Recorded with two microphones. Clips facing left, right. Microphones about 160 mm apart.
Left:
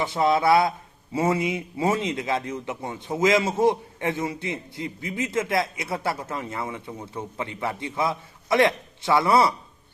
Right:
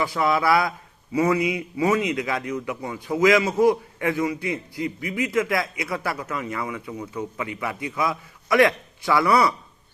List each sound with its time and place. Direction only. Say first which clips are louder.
0.0 s a man's voice: left 1 dB; 25° left (ahead or behind)